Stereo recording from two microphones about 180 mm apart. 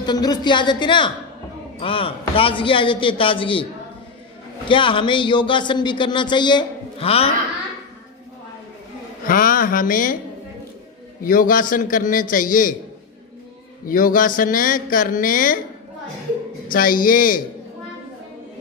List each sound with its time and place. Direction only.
0.0 s speech: 20° left (ahead or behind)
4.6 s speech: 30° left (ahead or behind)
9.2 s speech: 50° left (ahead or behind)
11.2 s speech: 50° left (ahead or behind)
13.8 s speech: 50° left (ahead or behind)
16.6 s speech: 50° left (ahead or behind)